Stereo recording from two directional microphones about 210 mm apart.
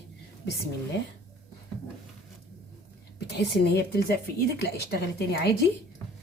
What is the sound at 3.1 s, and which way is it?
A woman's voice, 55° left (ahead or behind).